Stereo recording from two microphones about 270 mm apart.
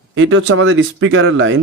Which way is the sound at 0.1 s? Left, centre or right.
Right.